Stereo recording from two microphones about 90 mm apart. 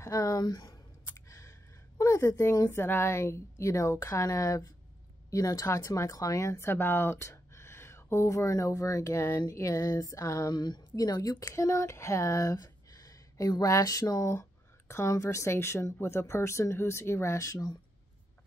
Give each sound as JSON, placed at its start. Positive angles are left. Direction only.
{"t": 0.0, "sound": "speech", "side_deg": 40}
{"t": 2.0, "sound": "a sound", "side_deg": 35}
{"t": 2.7, "sound": "speech", "side_deg": 25}
{"t": 10.5, "sound": "speech", "side_deg": 50}